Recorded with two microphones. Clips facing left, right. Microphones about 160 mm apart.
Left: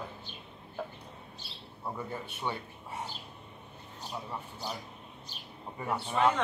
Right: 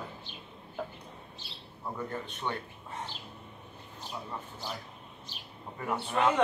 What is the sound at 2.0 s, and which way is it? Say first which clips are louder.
Speech: right 1 dB; 10° left (ahead or behind).